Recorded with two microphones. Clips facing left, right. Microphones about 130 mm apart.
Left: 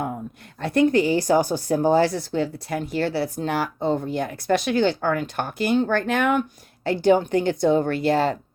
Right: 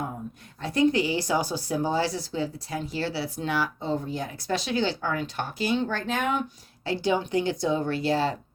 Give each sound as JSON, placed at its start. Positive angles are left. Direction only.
{"t": 0.6, "sound": "a woman's voice", "side_deg": 60}